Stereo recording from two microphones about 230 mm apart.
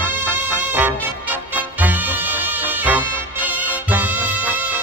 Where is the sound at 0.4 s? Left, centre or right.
Centre.